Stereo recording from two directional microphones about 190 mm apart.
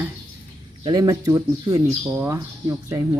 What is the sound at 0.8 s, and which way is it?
Speech, 20° right (ahead or behind).